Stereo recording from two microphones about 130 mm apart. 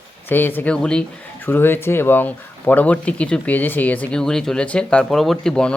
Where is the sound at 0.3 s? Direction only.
15° left (ahead or behind).